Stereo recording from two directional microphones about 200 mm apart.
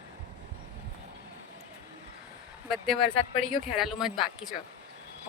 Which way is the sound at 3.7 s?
Centre (ahead or behind).